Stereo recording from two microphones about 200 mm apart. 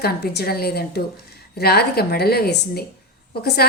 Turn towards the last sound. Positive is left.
turn(degrees=50)  # may be behind; listen again after turning